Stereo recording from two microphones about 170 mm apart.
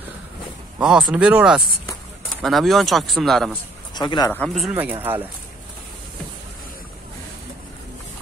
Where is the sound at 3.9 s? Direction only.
25° left (ahead or behind).